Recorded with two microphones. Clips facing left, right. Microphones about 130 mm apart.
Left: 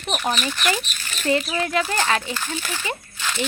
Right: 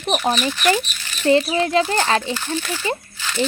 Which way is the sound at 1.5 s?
30° right (ahead or behind).